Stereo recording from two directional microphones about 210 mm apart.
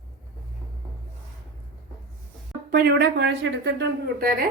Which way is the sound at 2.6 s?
45° right (ahead or behind).